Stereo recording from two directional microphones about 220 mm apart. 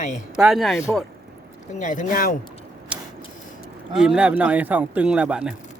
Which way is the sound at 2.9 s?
5° right (ahead or behind).